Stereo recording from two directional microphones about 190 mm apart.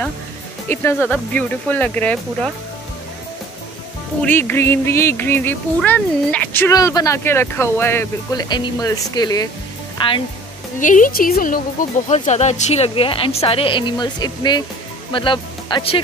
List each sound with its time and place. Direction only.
0.7 s speech: 10° left (ahead or behind)
4.2 s speech: 10° left (ahead or behind); by 10.2 s 25° left (ahead or behind)
10.8 s a woman's voice: 45° left (ahead or behind)
12.1 s speech: 35° left (ahead or behind)